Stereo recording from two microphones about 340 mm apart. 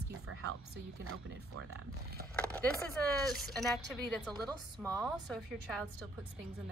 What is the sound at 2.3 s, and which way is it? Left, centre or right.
A woman's voice, centre.